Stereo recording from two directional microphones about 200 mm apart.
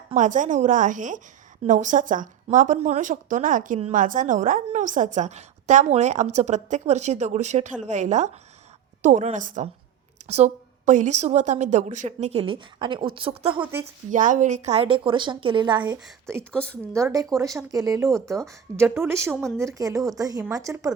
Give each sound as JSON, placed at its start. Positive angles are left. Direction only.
{"t": 0.1, "sound": "speech", "side_deg": -40}
{"t": 13.6, "sound": "a woman's voice", "side_deg": -10}
{"t": 13.8, "sound": "speech", "side_deg": -40}
{"t": 16.4, "sound": "speech", "side_deg": 5}
{"t": 16.9, "sound": "a woman's voice", "side_deg": -15}